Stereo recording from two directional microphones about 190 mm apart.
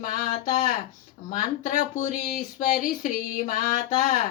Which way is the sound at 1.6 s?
45° left (ahead or behind).